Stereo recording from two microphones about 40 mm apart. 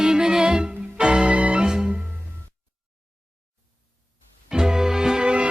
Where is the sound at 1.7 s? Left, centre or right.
Centre.